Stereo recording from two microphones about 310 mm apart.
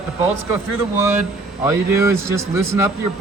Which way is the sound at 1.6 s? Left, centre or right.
Centre.